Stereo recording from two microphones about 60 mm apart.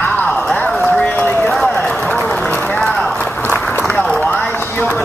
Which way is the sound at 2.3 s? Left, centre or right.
Centre.